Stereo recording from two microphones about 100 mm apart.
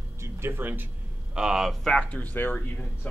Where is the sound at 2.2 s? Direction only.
20° left (ahead or behind).